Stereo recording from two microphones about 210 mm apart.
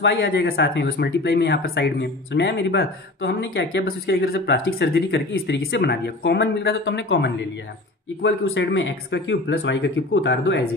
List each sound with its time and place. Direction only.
0.0 s speech: 55° left (ahead or behind)